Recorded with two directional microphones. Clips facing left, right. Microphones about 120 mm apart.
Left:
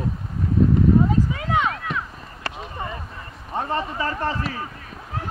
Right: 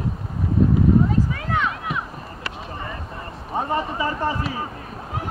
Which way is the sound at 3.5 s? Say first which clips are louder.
Right 1 dB; 15° right (ahead or behind).